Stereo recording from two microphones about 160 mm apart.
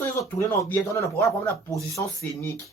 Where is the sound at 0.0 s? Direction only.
15° left (ahead or behind).